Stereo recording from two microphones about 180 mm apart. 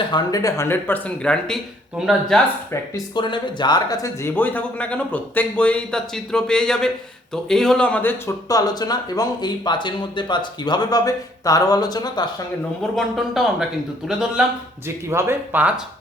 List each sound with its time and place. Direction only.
0.1 s speech: 20° left (ahead or behind); by 2.4 s centre (ahead or behind)
2.9 s speech: 25° left (ahead or behind)
12.8 s speech: centre (ahead or behind)
14.8 s speech: 15° right (ahead or behind)